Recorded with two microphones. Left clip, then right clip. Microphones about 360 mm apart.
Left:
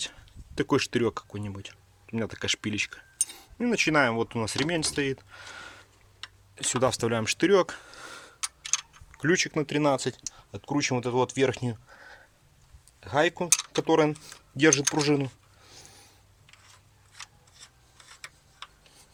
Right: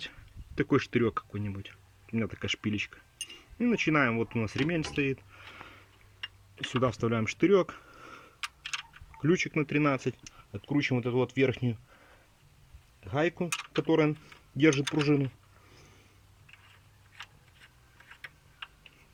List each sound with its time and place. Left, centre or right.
0.0 s speech: left
6.6 s a sound: left
9.1 s speech: left
13.1 s speech: left